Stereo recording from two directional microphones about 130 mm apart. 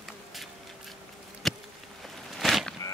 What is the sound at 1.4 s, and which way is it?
Insect, centre (ahead or behind).